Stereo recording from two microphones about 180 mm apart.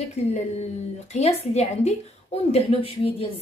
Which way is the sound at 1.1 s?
35° left (ahead or behind).